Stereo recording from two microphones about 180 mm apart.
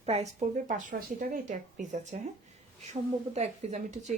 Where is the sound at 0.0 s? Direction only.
35° right (ahead or behind).